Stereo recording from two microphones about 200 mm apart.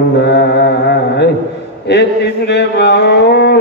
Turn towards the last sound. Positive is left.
turn(degrees=55)  # may be behind; listen again after turning